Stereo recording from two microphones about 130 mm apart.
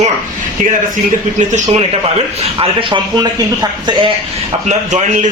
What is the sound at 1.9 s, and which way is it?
A man's voice, 45° right (ahead or behind).